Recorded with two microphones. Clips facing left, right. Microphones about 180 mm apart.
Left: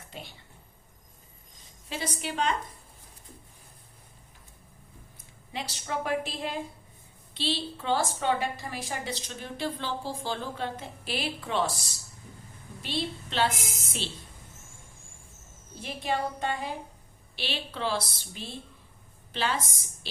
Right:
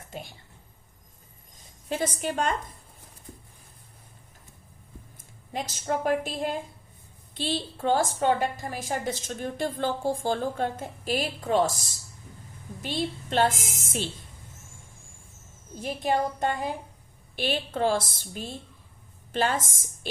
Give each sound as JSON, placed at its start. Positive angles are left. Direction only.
{"t": 0.1, "sound": "a woman's voice", "side_deg": -45}
{"t": 1.9, "sound": "a woman's voice", "side_deg": -50}
{"t": 5.1, "sound": "a woman's voice", "side_deg": -45}
{"t": 15.7, "sound": "a woman's voice", "side_deg": -45}